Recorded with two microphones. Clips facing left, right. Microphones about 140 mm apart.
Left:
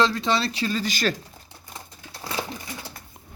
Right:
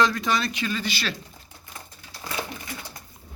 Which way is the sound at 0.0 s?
25° left (ahead or behind).